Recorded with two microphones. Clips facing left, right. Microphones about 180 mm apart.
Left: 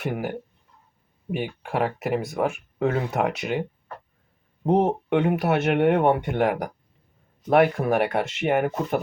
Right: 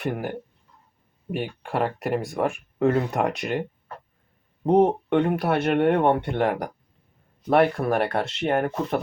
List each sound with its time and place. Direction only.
0.0 s speech: 5° left (ahead or behind)